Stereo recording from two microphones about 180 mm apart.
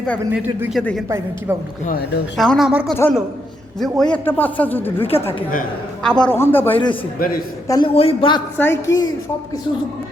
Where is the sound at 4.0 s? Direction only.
10° left (ahead or behind).